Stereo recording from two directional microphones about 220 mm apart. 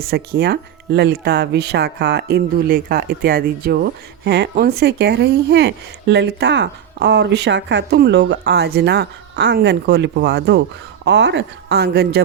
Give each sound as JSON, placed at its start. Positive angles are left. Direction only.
{"t": 0.0, "sound": "speech", "side_deg": -45}